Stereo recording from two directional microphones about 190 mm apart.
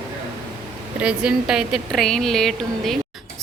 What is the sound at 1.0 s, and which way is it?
A woman's voice, 5° right (ahead or behind).